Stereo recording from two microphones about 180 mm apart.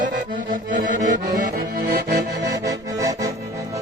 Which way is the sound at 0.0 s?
45° right (ahead or behind).